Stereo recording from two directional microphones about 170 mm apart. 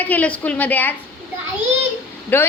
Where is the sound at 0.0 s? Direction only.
10° left (ahead or behind).